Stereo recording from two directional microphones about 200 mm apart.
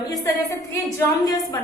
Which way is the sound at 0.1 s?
15° left (ahead or behind).